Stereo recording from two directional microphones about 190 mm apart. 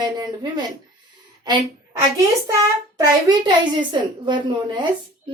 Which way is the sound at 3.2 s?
25° right (ahead or behind).